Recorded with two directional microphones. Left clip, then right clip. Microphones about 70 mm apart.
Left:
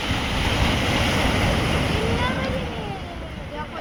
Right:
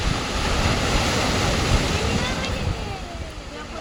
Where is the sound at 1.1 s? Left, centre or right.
Centre.